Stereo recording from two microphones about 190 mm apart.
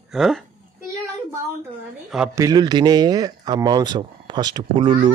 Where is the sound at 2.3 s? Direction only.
20° right (ahead or behind).